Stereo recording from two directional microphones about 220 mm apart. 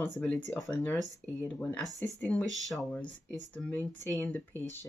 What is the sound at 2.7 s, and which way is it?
Speech, centre (ahead or behind).